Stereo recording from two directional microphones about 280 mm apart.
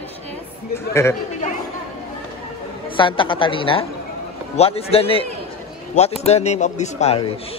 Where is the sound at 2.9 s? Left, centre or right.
Centre.